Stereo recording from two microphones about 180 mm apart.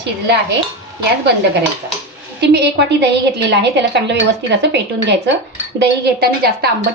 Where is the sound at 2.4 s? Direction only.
70° right (ahead or behind).